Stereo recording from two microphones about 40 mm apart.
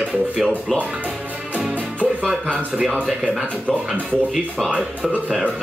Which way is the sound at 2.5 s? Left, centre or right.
Right.